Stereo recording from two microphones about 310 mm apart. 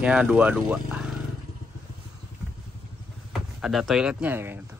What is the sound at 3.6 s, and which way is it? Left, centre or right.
Speech, centre.